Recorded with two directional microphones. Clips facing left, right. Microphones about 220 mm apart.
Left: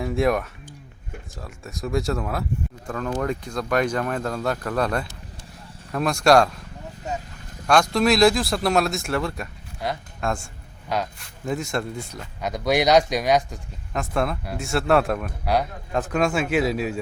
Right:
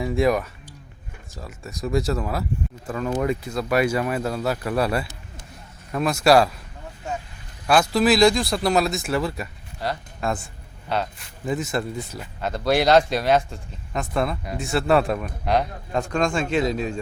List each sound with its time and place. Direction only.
0.0 s a man's voice: centre (ahead or behind)
7.7 s a man's voice: 5° right (ahead or behind)
13.0 s speech: 15° left (ahead or behind)
13.9 s a man's voice: centre (ahead or behind)